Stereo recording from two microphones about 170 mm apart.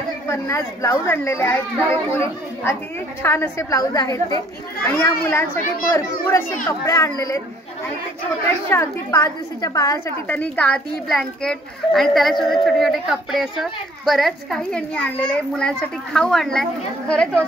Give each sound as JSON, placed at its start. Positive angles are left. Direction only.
{"t": 0.3, "sound": "a child's voice", "side_deg": 15}
{"t": 8.6, "sound": "a child's voice", "side_deg": 15}